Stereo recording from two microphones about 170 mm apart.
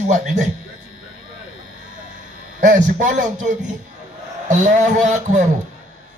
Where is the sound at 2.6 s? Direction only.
50° right (ahead or behind).